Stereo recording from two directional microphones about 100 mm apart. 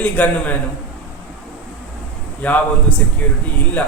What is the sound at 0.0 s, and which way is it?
Speech, 15° left (ahead or behind).